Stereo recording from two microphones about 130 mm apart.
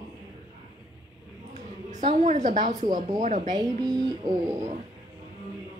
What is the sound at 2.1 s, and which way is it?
Speech, 65° right (ahead or behind).